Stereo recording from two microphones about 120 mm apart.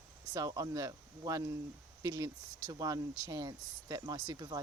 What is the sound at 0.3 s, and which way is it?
Speech, 30° right (ahead or behind).